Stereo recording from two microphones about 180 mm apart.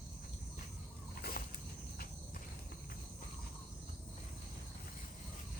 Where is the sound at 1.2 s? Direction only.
55° left (ahead or behind).